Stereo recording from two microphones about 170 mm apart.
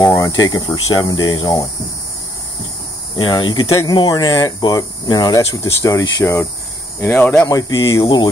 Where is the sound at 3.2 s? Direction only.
25° left (ahead or behind); by 7.5 s 10° left (ahead or behind).